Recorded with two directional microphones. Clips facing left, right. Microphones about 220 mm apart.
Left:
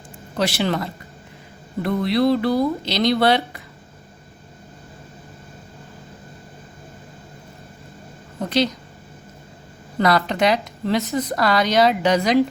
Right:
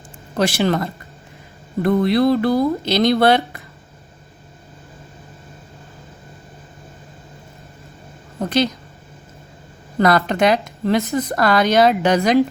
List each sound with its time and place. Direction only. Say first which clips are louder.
0.3 s speech: right 4 dB; 50° right (ahead or behind)
8.4 s speech: right 2 dB; 50° right (ahead or behind)
10.0 s speech: right 3 dB; 50° right (ahead or behind)